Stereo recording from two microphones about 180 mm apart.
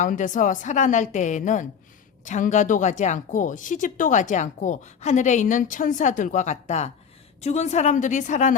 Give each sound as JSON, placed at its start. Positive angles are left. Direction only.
{"t": 0.0, "sound": "a woman's voice", "side_deg": 45}